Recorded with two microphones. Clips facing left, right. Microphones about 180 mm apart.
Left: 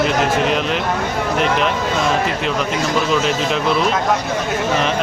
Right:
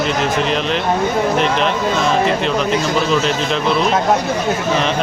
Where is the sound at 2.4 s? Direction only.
5° left (ahead or behind).